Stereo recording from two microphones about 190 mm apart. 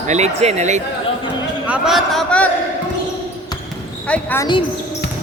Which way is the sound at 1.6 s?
Centre (ahead or behind).